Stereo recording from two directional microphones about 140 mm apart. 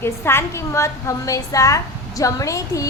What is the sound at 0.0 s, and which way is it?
A woman's voice, 15° left (ahead or behind).